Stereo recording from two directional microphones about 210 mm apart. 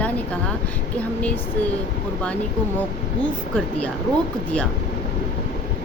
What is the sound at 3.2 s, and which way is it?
Speech, 5° left (ahead or behind).